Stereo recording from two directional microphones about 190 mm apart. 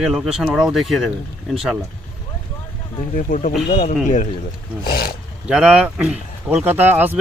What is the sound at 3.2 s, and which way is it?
Speech, 45° left (ahead or behind).